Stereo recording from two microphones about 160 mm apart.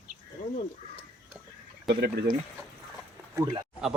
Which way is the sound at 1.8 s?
90° right.